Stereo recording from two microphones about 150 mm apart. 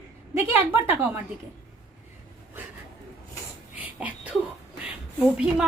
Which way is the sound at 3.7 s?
10° right (ahead or behind).